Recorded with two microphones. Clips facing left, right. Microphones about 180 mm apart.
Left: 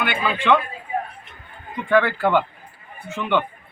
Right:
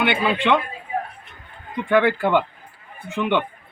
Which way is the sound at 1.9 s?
15° right (ahead or behind).